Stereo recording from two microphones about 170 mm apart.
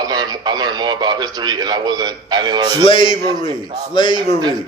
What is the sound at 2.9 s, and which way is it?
A man's voice, 30° left (ahead or behind).